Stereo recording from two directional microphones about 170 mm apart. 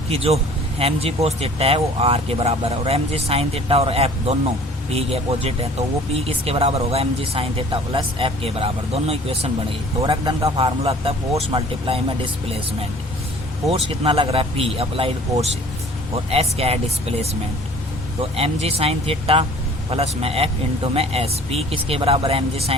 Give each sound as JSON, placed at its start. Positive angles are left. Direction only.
{"t": 0.1, "sound": "speech", "side_deg": -35}
{"t": 13.7, "sound": "speech", "side_deg": -35}
{"t": 18.2, "sound": "speech", "side_deg": -35}